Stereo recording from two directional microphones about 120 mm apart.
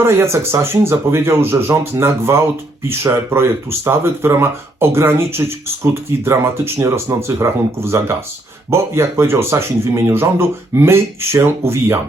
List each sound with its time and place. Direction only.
0.0 s speech: 20° right (ahead or behind)